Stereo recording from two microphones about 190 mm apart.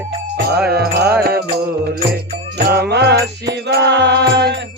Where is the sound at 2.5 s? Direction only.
60° right (ahead or behind).